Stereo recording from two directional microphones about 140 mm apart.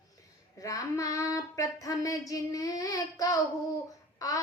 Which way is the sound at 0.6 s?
25° left (ahead or behind).